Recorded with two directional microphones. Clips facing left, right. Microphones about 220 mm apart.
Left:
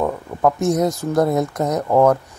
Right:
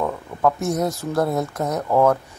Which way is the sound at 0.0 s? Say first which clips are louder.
Left 2 dB; 15° left (ahead or behind).